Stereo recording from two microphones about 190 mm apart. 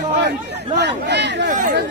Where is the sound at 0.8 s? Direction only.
65° right (ahead or behind).